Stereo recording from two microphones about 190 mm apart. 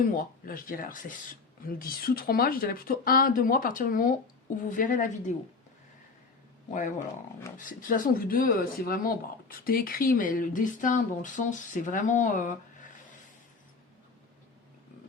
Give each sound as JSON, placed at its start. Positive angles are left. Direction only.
{"t": 0.0, "sound": "speech", "side_deg": 50}
{"t": 6.7, "sound": "speech", "side_deg": 40}